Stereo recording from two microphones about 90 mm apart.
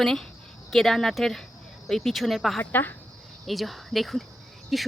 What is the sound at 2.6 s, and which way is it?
Speech, 20° left (ahead or behind).